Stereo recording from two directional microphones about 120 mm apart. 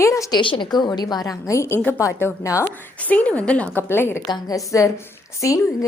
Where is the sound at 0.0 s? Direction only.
25° left (ahead or behind).